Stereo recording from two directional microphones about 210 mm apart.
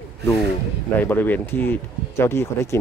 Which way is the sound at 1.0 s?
10° left (ahead or behind).